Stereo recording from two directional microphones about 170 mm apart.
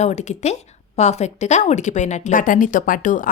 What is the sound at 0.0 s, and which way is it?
Speech, 40° left (ahead or behind).